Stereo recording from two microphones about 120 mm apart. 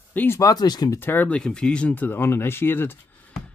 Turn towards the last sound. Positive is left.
turn(degrees=20)  # may be behind; listen again after turning